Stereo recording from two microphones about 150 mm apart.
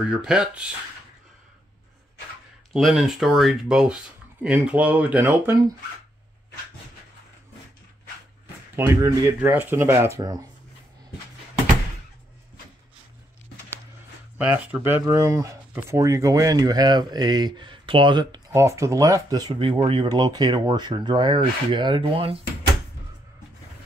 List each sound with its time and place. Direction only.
0.1 s speech: 5° right (ahead or behind)
2.7 s speech: centre (ahead or behind)
8.7 s speech: 15° right (ahead or behind)
14.4 s speech: 10° right (ahead or behind); by 18.4 s 30° right (ahead or behind)
18.5 s speech: 20° right (ahead or behind); by 22.4 s 40° right (ahead or behind)